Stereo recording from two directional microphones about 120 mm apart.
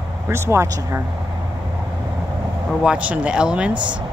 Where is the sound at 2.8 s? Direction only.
10° right (ahead or behind).